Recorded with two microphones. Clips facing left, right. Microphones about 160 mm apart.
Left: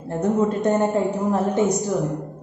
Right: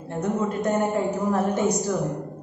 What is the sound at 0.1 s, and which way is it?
Speech, 40° left (ahead or behind).